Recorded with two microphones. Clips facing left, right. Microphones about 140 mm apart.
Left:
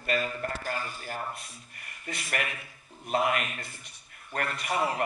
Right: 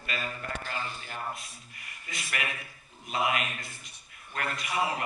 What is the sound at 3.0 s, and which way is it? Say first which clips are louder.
A man's voice: left 2 dB; 45° left (ahead or behind).